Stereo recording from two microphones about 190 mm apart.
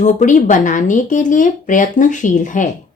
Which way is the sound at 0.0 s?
40° left (ahead or behind).